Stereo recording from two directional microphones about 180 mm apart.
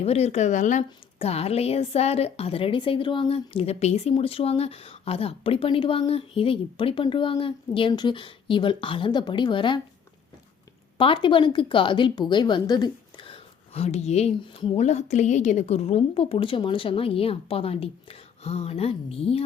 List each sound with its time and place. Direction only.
0.0 s a woman's voice: 35° left (ahead or behind)
10.9 s a woman's voice: 30° left (ahead or behind)